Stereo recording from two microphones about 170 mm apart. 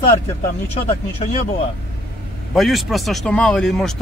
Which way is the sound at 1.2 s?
30° left (ahead or behind).